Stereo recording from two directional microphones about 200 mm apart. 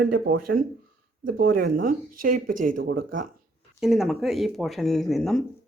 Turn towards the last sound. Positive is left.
turn(degrees=0)  # may be behind; listen again after turning